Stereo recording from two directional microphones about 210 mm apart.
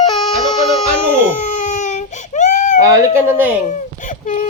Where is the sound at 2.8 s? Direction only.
15° right (ahead or behind).